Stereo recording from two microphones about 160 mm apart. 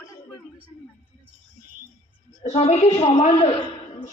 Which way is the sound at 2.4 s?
40° left (ahead or behind).